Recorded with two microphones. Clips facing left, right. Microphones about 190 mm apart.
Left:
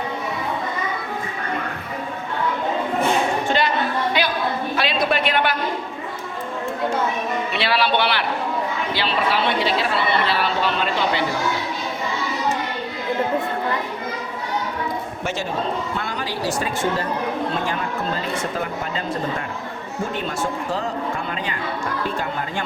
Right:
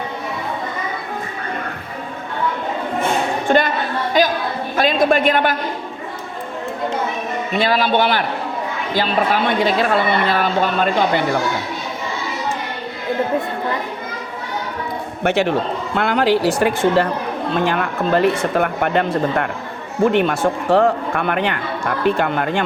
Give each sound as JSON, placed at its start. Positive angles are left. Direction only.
{"t": 3.4, "sound": "a sound", "side_deg": -50}
{"t": 4.1, "sound": "a woman's voice", "side_deg": -45}
{"t": 7.5, "sound": "a woman's voice", "side_deg": -45}
{"t": 15.2, "sound": "a man's voice", "side_deg": -65}
{"t": 16.0, "sound": "speech", "side_deg": -75}